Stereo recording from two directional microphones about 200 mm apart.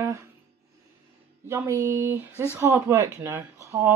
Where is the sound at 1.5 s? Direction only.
15° right (ahead or behind).